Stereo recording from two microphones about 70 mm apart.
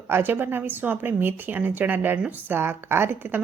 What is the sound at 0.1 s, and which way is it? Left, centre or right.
A woman's voice, right.